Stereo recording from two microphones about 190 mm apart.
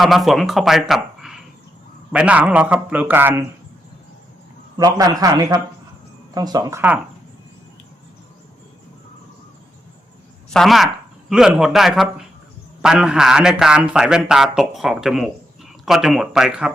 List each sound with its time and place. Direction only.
0.0 s a man's voice: centre (ahead or behind)
4.8 s a man's voice: 20° right (ahead or behind)
10.5 s a man's voice: centre (ahead or behind)